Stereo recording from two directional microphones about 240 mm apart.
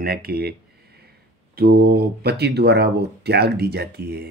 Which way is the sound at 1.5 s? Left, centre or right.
Right.